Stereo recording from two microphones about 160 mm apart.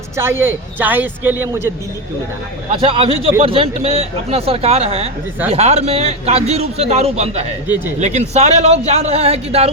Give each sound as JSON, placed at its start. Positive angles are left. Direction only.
{"t": 0.2, "sound": "speech", "side_deg": -15}
{"t": 2.8, "sound": "a man's voice", "side_deg": -35}